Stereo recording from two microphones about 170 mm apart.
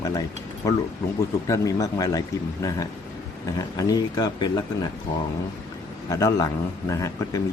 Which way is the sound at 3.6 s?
20° left (ahead or behind).